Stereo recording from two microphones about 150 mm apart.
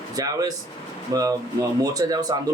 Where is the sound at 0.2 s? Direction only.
25° right (ahead or behind).